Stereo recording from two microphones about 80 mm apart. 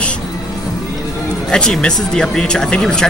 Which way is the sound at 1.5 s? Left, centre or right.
Centre.